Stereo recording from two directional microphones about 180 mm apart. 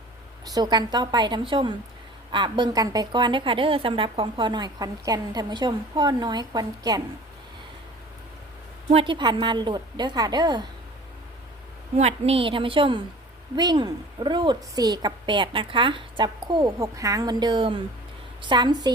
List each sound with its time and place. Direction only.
0.4 s a woman's voice: 25° right (ahead or behind)
8.9 s a woman's voice: 30° right (ahead or behind)
11.9 s a woman's voice: 35° right (ahead or behind)